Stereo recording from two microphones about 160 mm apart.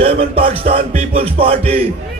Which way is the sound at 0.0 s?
40° right (ahead or behind).